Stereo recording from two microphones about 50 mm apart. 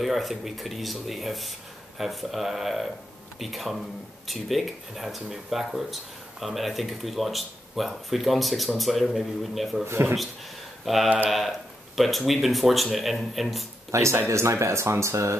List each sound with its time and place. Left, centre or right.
0.0 s speech: centre
9.8 s speech: right
10.9 s speech: centre
13.9 s speech: right